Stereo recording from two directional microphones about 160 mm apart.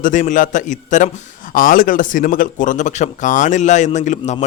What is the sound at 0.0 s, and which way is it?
A man's voice, 55° left (ahead or behind).